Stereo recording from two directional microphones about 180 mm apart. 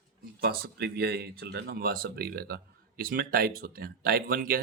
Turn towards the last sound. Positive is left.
turn(degrees=-55)  # may be behind; listen again after turning